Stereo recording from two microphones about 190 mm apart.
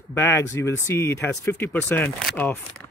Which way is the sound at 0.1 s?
15° left (ahead or behind).